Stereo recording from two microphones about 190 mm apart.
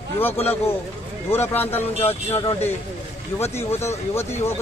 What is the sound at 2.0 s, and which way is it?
Speech, 35° left (ahead or behind).